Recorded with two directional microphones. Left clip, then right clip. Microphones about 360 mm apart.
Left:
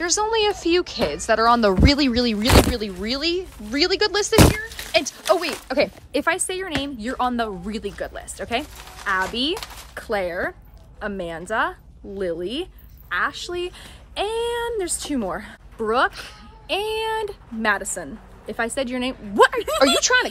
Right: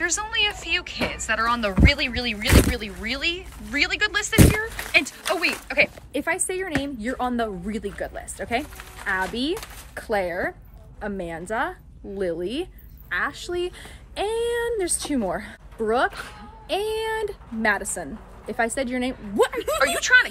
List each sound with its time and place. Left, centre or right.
0.0 s speech: centre
16.1 s speech: centre
16.6 s speech: centre
19.3 s speech: centre